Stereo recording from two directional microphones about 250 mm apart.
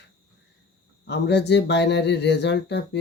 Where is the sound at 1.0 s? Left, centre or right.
Left.